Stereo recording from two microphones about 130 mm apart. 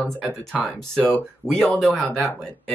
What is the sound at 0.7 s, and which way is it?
Speech, 5° left (ahead or behind).